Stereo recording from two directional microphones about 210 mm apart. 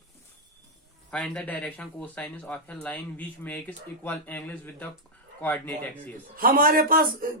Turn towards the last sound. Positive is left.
turn(degrees=-45)  # may be behind; listen again after turning